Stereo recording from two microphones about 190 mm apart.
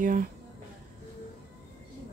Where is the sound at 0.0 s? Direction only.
45° right (ahead or behind).